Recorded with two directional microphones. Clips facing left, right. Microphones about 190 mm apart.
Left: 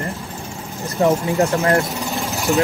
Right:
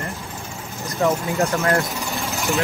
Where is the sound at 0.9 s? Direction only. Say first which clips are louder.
Left 4 dB; 35° left (ahead or behind).